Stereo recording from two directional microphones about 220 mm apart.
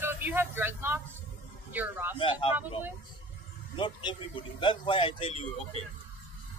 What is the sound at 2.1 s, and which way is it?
Speech, 25° left (ahead or behind).